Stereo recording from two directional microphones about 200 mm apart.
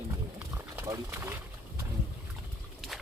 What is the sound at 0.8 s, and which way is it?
Speech, 10° right (ahead or behind).